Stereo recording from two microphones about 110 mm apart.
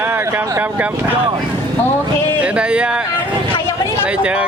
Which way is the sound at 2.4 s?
10° right (ahead or behind).